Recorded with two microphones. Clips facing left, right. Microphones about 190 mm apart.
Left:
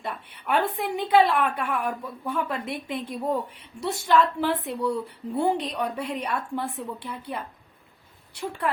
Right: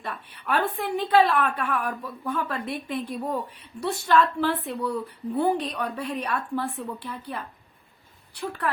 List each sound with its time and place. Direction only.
0.0 s a woman's voice: 20° left (ahead or behind)